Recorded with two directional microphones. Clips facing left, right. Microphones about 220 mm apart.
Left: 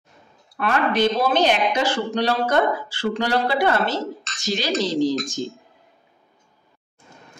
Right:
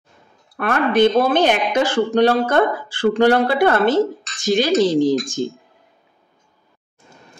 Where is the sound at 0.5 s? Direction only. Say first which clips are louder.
Right 4 dB; 55° right (ahead or behind).